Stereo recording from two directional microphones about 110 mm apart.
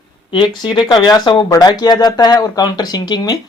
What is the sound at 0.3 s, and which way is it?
Speech, 45° left (ahead or behind).